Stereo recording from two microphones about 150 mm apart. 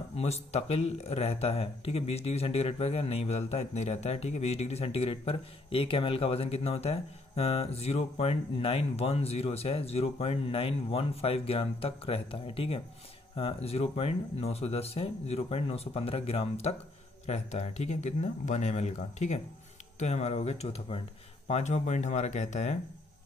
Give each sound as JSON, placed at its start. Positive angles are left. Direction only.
{"t": 0.1, "sound": "speech", "side_deg": 45}